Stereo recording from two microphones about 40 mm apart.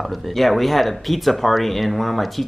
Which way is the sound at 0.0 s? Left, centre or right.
Centre.